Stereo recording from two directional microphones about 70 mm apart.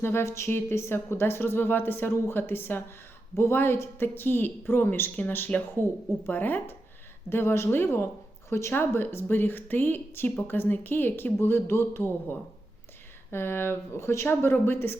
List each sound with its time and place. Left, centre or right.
0.0 s a woman's voice: left